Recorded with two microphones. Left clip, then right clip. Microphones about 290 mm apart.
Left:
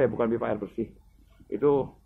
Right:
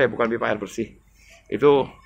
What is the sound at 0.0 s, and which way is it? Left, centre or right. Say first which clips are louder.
A man's voice: right 5 dB; centre.